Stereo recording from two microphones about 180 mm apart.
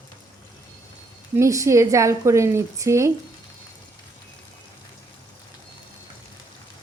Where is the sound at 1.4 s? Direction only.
15° right (ahead or behind).